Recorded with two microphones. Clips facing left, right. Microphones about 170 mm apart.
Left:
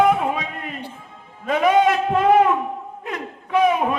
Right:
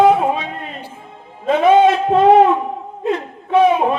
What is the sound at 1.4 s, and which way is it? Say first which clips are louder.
A man's voice: right 5 dB; 30° right (ahead or behind).